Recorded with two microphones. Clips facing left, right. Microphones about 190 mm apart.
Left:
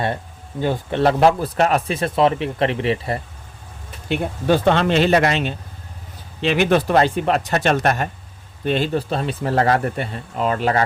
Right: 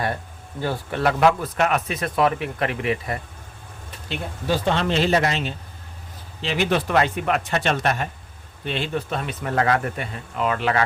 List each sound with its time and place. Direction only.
0.6 s speech: 20° left (ahead or behind)
4.1 s speech: 60° left (ahead or behind)
6.7 s speech: 35° left (ahead or behind)